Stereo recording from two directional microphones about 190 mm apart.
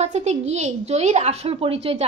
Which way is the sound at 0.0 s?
35° right (ahead or behind).